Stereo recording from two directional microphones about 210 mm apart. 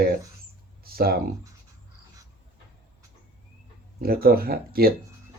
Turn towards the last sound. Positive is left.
turn(degrees=-45)  # may be behind; listen again after turning